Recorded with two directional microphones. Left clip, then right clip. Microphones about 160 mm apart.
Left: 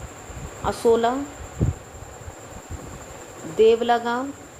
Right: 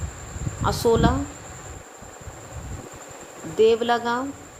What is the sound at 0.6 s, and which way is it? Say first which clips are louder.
Speech: left 1 dB; 30° right (ahead or behind).